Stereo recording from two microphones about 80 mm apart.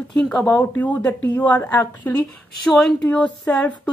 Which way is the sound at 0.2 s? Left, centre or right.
Centre.